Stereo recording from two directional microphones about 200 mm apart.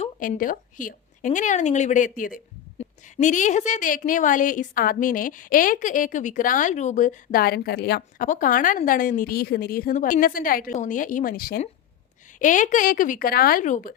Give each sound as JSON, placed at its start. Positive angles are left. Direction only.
{"t": 0.0, "sound": "speech", "side_deg": 45}